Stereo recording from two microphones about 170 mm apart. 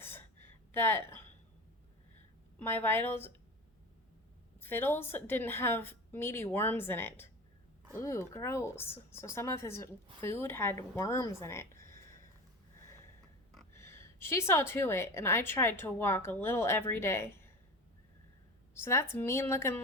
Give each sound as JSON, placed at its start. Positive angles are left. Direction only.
{"t": 0.0, "sound": "gasp", "side_deg": 15}
{"t": 2.6, "sound": "speech", "side_deg": 10}
{"t": 4.6, "sound": "speech", "side_deg": 10}
{"t": 13.7, "sound": "speech", "side_deg": 15}
{"t": 18.7, "sound": "speech", "side_deg": 15}